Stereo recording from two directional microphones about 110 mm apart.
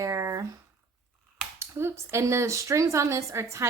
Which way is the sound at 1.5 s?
25° right (ahead or behind).